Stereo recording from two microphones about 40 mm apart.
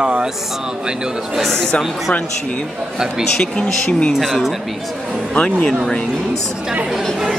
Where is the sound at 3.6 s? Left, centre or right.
Left.